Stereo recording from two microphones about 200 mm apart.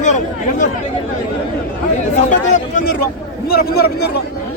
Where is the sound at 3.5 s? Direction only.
50° left (ahead or behind).